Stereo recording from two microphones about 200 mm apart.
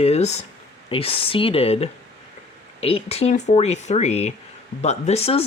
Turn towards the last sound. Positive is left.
turn(degrees=30)  # may be behind; listen again after turning